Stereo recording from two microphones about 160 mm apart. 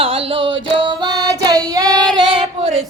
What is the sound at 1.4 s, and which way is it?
Child singing, 25° right (ahead or behind).